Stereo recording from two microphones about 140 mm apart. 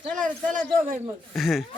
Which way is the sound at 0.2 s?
70° right (ahead or behind).